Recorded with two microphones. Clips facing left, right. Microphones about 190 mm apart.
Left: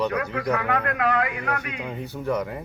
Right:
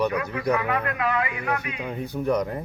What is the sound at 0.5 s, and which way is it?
Speech, 60° left (ahead or behind).